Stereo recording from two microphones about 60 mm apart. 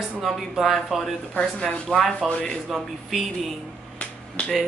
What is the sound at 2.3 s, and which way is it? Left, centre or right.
Speech, centre.